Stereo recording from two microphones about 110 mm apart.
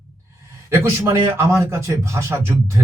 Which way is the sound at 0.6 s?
25° right (ahead or behind).